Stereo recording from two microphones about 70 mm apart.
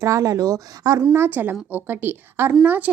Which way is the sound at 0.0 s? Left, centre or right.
Right.